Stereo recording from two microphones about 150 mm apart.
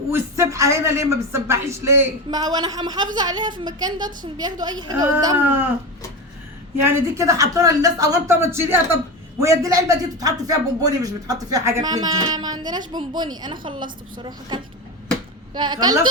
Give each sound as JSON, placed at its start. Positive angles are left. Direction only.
{"t": 0.1, "sound": "speech", "side_deg": -20}
{"t": 5.4, "sound": "speech", "side_deg": -15}
{"t": 6.8, "sound": "a woman's voice", "side_deg": -20}